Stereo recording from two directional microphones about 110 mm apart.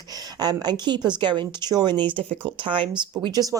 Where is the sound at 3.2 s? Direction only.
35° right (ahead or behind).